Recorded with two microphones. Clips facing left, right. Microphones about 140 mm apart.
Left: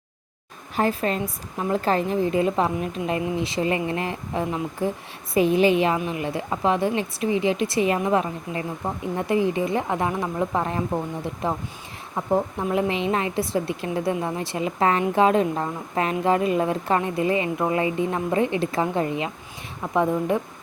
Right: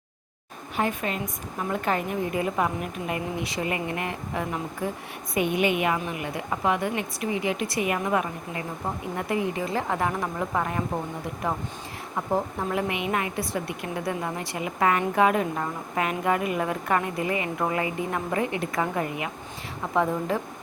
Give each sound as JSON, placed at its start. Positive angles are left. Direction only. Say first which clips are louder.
{"t": 0.8, "sound": "a woman's voice", "louder": "left 4 dB", "side_deg": 35}